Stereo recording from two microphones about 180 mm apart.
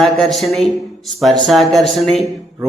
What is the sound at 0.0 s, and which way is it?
A man's voice, centre (ahead or behind).